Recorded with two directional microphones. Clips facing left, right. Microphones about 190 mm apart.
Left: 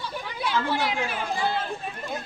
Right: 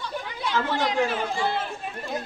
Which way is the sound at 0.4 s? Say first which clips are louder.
Even; 10° left (ahead or behind).